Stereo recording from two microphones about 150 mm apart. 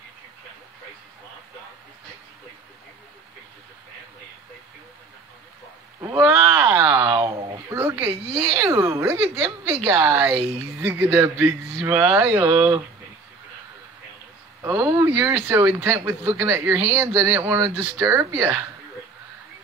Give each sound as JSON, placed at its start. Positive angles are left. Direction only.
{"t": 5.9, "sound": "a sound", "side_deg": -20}
{"t": 8.4, "sound": "a woman's voice", "side_deg": -15}
{"t": 14.6, "sound": "speech", "side_deg": -20}